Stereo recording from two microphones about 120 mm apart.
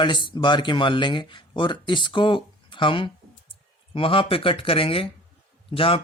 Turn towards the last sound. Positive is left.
turn(degrees=50)  # may be behind; listen again after turning